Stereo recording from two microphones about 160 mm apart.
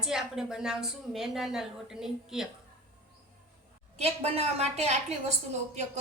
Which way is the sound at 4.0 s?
40° right (ahead or behind).